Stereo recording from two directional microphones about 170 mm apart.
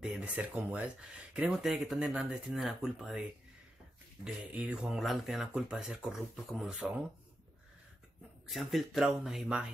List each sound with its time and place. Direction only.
0.0 s speech: 5° right (ahead or behind)
8.5 s speech: centre (ahead or behind)